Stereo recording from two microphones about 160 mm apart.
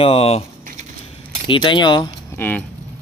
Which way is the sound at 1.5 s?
30° left (ahead or behind).